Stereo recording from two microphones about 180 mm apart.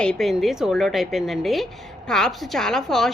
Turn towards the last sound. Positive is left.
turn(degrees=0)  # may be behind; listen again after turning